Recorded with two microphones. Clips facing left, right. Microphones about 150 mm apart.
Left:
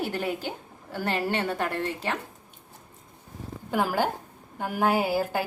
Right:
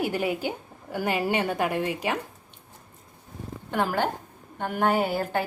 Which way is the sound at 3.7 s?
5° left (ahead or behind).